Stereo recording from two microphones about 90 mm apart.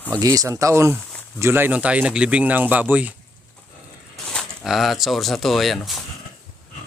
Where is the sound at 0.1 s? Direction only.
40° right (ahead or behind); by 3.1 s 15° right (ahead or behind).